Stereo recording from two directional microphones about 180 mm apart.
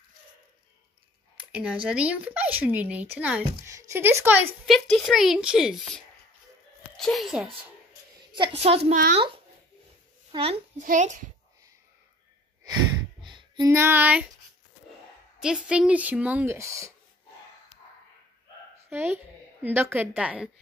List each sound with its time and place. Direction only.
1.5 s speech: 5° right (ahead or behind)
4.6 s a woman's voice: centre (ahead or behind)
8.3 s a woman's voice: 30° right (ahead or behind)
10.3 s a woman's voice: 30° right (ahead or behind)
10.8 s a child's voice: 45° right (ahead or behind)
13.3 s music: 25° right (ahead or behind); by 14.3 s 5° right (ahead or behind)
15.4 s speech: 5° right (ahead or behind)
18.9 s speech: 10° right (ahead or behind)